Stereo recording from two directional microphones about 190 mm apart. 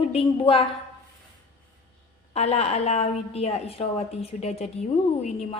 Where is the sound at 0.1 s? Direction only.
30° left (ahead or behind).